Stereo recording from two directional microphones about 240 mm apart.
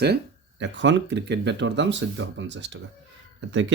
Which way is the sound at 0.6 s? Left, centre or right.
Right.